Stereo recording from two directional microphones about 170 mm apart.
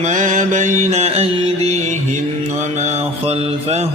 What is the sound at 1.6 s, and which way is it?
Music, 40° right (ahead or behind).